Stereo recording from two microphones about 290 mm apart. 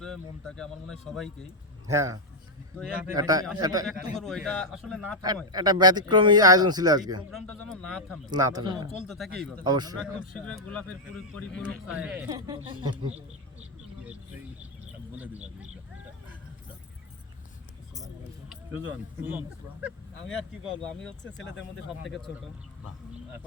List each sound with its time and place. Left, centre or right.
0.0 s speech: centre
1.9 s a man's voice: centre
3.8 s speech: centre
5.5 s a man's voice: centre
7.3 s speech: centre
8.3 s a man's voice: centre
9.0 s speech: centre
9.6 s a man's voice: centre
10.0 s a man's voice: centre
15.1 s speech: centre
19.2 s speech: centre